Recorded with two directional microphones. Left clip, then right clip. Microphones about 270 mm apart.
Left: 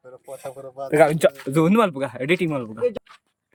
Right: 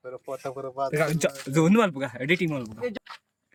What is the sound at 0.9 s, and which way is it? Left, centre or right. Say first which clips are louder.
Speech: left 10 dB; centre.